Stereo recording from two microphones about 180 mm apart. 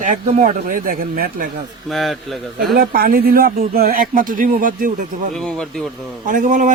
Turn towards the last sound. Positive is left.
turn(degrees=-45)  # may be behind; listen again after turning